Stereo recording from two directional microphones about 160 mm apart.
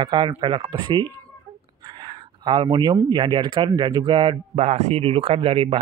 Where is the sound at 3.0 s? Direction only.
25° right (ahead or behind).